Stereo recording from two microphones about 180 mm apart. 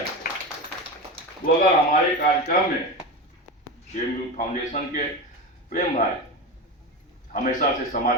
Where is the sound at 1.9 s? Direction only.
55° left (ahead or behind).